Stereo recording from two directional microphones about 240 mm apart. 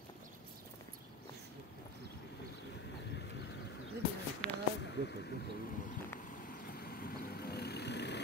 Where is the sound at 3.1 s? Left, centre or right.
Left.